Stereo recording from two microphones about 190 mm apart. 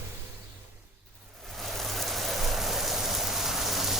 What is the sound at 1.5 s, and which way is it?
Rain, centre (ahead or behind).